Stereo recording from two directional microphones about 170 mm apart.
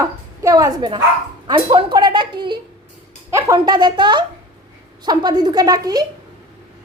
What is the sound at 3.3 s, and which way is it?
A child's voice, 15° right (ahead or behind).